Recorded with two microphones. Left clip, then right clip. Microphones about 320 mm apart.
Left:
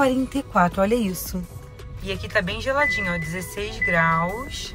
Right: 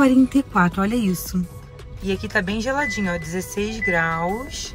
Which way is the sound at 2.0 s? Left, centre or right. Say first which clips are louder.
Right 1 dB; centre.